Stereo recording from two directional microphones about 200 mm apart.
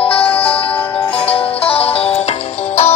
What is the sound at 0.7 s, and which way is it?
Music, 5° left (ahead or behind).